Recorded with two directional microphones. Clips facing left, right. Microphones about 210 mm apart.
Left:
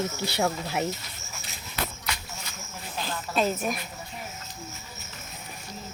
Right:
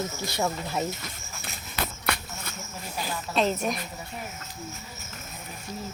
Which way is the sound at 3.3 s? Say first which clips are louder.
Right 1 dB; 5° left (ahead or behind).